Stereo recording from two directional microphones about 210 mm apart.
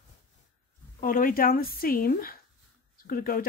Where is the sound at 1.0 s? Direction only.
40° left (ahead or behind).